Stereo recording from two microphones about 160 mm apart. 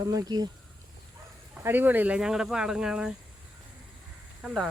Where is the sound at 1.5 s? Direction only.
10° right (ahead or behind).